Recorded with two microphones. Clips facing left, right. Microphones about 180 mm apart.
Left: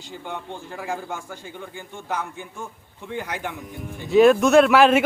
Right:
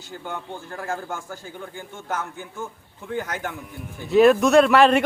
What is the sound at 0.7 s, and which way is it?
Speech, 10° left (ahead or behind).